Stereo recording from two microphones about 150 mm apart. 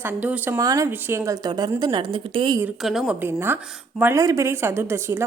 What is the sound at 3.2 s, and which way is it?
A woman's voice, 15° right (ahead or behind).